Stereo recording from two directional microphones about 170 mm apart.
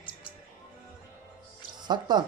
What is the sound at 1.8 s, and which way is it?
Speech, 25° right (ahead or behind).